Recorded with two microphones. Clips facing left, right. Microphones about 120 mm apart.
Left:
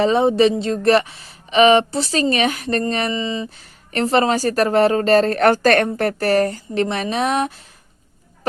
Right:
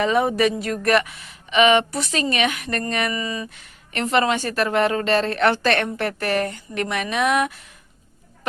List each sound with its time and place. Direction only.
0.0 s speech: 30° left (ahead or behind)